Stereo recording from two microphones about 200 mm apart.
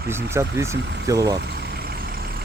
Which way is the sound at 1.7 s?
50° right (ahead or behind).